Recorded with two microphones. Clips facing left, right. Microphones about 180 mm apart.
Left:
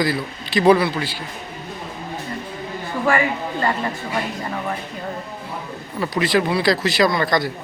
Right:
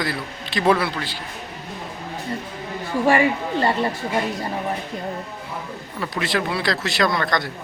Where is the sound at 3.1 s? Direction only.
30° right (ahead or behind).